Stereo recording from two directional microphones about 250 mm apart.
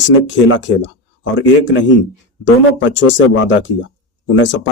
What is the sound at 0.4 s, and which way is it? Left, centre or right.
Speech, left.